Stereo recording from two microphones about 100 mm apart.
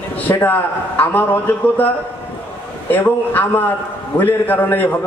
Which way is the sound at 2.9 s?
15° left (ahead or behind).